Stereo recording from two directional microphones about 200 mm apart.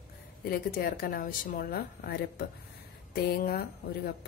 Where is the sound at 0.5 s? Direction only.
45° left (ahead or behind).